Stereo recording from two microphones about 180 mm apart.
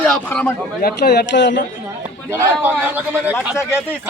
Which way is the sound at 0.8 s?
65° left (ahead or behind).